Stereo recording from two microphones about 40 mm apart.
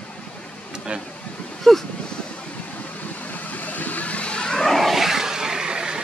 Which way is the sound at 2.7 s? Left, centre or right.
Left.